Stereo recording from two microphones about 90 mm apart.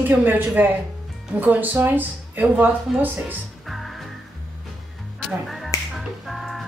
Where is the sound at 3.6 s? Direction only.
Centre (ahead or behind).